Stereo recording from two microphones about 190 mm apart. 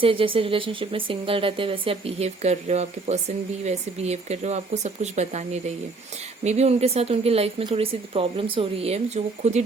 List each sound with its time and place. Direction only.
0.0 s speech: 30° right (ahead or behind)